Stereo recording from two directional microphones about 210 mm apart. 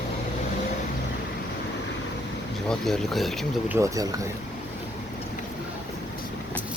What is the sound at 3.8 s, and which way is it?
Speech, 15° right (ahead or behind).